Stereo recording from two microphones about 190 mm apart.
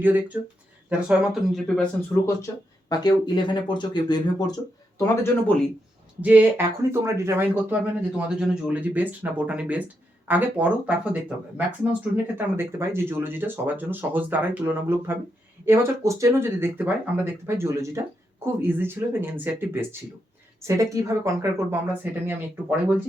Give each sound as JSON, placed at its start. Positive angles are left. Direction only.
{"t": 0.0, "sound": "speech", "side_deg": -10}
{"t": 2.9, "sound": "speech", "side_deg": 25}
{"t": 6.2, "sound": "speech", "side_deg": -10}